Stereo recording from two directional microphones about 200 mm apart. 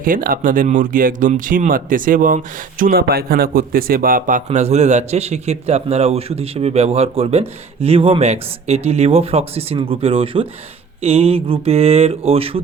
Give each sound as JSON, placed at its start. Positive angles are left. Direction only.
{"t": 0.0, "sound": "speech", "side_deg": -45}